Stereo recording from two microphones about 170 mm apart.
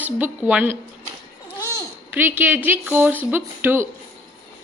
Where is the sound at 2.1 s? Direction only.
10° right (ahead or behind).